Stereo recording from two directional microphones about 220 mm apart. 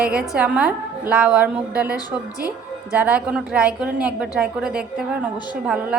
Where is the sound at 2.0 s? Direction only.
15° left (ahead or behind).